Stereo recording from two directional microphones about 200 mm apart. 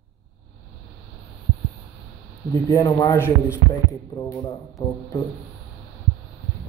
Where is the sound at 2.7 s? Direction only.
20° left (ahead or behind).